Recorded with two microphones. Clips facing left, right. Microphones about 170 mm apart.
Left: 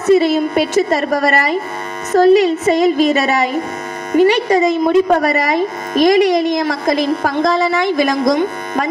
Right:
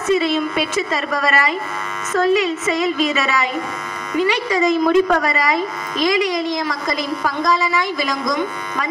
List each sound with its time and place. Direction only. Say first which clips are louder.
0.0 s a woman's voice: left 6 dB; 40° left (ahead or behind)
4.8 s a woman's voice: left 1 dB; 25° left (ahead or behind)
5.9 s a woman's voice: left 8 dB; 50° left (ahead or behind)